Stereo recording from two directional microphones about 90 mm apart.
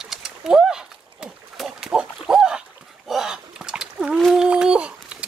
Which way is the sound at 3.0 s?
5° right (ahead or behind).